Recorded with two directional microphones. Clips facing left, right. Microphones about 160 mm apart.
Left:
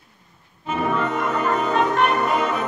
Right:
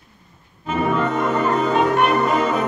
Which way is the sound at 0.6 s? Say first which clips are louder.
Right 2 dB; 5° left (ahead or behind).